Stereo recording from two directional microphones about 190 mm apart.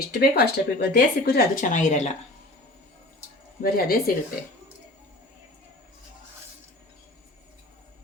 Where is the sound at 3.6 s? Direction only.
50° left (ahead or behind).